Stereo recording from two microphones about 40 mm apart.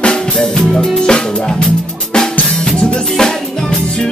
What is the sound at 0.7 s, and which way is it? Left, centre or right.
Music, left.